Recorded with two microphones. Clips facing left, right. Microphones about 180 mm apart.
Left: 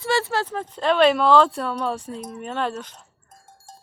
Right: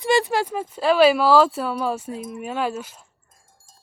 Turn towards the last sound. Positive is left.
turn(degrees=70)  # may be behind; listen again after turning